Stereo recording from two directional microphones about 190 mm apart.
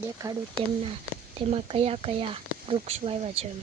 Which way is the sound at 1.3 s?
30° right (ahead or behind).